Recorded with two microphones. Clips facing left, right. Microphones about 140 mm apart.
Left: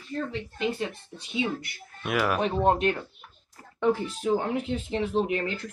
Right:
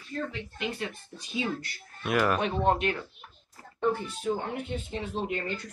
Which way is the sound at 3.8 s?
90° left.